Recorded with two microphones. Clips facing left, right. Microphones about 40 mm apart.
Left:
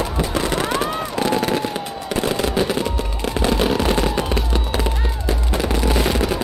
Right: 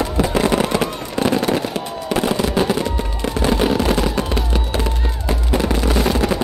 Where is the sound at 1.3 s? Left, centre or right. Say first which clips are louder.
Right 1 dB; centre.